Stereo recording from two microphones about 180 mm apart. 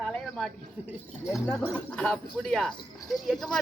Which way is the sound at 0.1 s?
Centre (ahead or behind).